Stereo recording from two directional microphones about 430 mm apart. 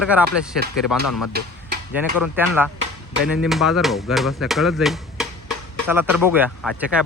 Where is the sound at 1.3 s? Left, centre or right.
Right.